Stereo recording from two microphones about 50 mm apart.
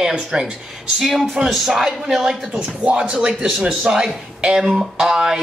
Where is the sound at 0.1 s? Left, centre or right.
Centre.